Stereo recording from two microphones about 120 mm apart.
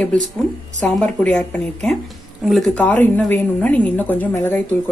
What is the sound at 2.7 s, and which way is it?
A woman's voice, 15° left (ahead or behind).